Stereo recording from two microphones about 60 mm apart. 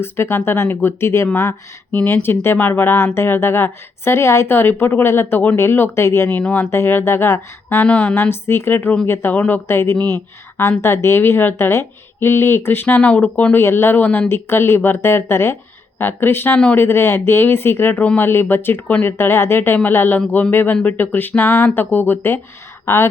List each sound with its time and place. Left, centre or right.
0.0 s speech: left
1.9 s speech: left
2.2 s speech: left
2.6 s speech: left
7.9 s speech: left
8.1 s speech: left
9.3 s speech: left
9.6 s speech: left
13.0 s speech: left
13.6 s speech: left
13.9 s speech: left
20.1 s speech: left
20.5 s speech: left